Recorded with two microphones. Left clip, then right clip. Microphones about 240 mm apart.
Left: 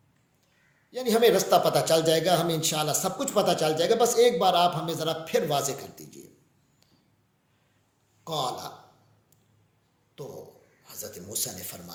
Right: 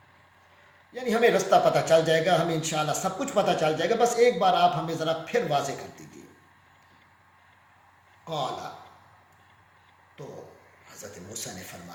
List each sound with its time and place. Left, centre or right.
0.9 s a man's voice: left